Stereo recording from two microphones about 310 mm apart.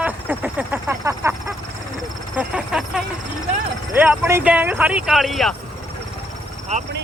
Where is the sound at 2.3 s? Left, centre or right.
Centre.